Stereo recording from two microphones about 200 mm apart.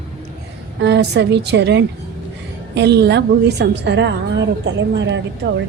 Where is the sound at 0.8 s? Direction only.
60° right (ahead or behind).